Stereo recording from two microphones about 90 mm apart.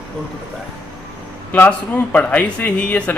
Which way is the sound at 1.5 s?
20° left (ahead or behind).